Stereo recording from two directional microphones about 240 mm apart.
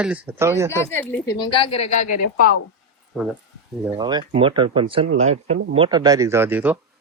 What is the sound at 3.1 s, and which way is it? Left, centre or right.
Speech, centre.